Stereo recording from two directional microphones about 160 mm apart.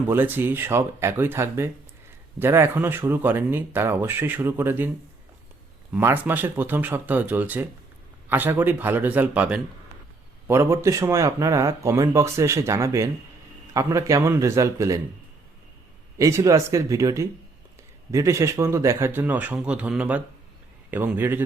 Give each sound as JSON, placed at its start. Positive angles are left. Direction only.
{"t": 0.1, "sound": "speech", "side_deg": -15}
{"t": 5.9, "sound": "speech", "side_deg": -15}
{"t": 16.1, "sound": "speech", "side_deg": -20}